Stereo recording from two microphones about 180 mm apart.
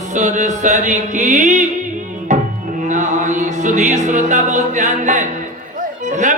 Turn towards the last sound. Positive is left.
turn(degrees=-45)  # may be behind; listen again after turning